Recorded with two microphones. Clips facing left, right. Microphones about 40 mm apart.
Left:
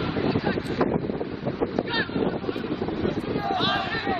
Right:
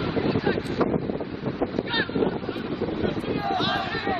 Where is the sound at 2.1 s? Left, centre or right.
Centre.